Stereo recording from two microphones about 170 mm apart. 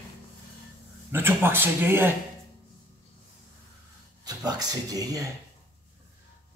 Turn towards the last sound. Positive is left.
turn(degrees=-20)  # may be behind; listen again after turning